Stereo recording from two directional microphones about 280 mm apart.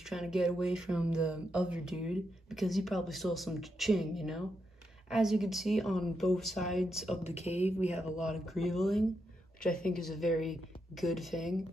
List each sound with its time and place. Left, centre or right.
0.1 s speech: centre
7.2 s speech: left
8.0 s a woman's voice: centre